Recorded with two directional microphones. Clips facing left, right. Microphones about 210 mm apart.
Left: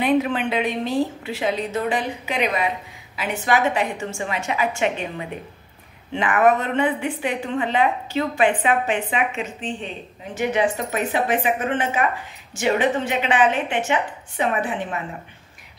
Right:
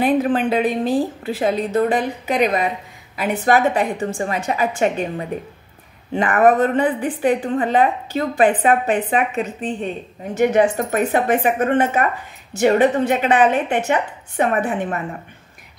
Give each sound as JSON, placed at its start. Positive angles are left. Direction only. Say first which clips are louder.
{"t": 0.0, "sound": "a woman's voice", "louder": "right 3 dB", "side_deg": -45}